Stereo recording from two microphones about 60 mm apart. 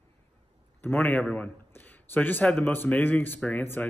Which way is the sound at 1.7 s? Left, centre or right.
Left.